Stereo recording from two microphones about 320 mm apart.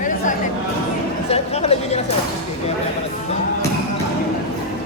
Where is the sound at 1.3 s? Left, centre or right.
Centre.